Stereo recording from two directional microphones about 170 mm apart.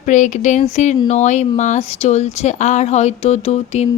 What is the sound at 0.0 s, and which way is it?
A woman's voice, 45° left (ahead or behind).